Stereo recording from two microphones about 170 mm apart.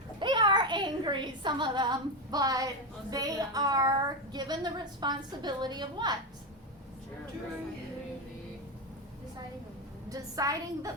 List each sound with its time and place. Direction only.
0.2 s a sound: 25° right (ahead or behind)
3.1 s a woman's voice: 20° right (ahead or behind)
10.1 s a woman's voice: 20° right (ahead or behind)